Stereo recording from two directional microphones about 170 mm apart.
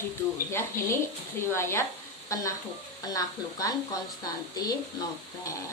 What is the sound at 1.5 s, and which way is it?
Speech, 15° left (ahead or behind).